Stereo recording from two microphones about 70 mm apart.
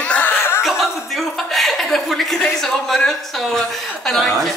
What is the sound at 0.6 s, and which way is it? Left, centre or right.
A man's voice, centre.